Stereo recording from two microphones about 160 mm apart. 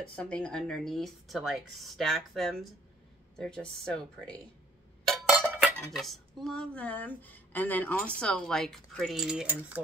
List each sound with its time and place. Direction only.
0.1 s speech: 5° left (ahead or behind)
5.1 s dishes: centre (ahead or behind)
6.4 s speech: 5° left (ahead or behind)